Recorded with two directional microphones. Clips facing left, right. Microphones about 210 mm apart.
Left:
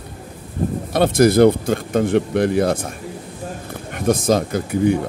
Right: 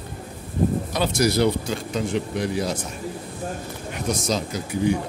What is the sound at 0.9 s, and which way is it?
Speech, 55° left (ahead or behind).